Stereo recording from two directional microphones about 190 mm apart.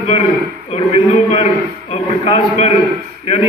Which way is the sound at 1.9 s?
30° left (ahead or behind).